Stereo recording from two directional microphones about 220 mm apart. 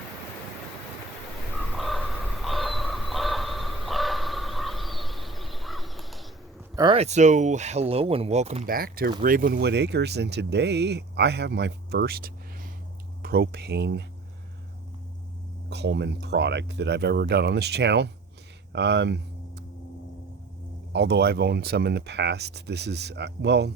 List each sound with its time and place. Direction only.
1.8 s crow: centre (ahead or behind)
6.7 s speech: 25° right (ahead or behind); by 14.0 s 50° right (ahead or behind)
15.7 s speech: 50° right (ahead or behind)
18.7 s a sound: 50° right (ahead or behind)
20.9 s speech: 50° right (ahead or behind)